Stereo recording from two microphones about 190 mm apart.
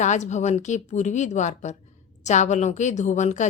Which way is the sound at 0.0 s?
40° left (ahead or behind).